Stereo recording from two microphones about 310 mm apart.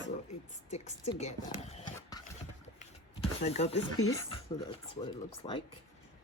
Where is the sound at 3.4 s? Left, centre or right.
Left.